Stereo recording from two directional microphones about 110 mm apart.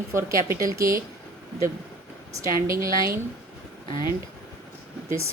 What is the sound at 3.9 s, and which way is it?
Speech, 40° left (ahead or behind).